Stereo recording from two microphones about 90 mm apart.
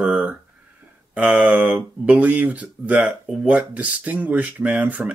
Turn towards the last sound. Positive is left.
turn(degrees=-20)  # may be behind; listen again after turning